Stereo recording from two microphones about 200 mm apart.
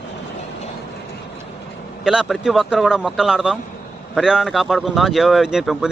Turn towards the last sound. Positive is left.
turn(degrees=0)  # may be behind; listen again after turning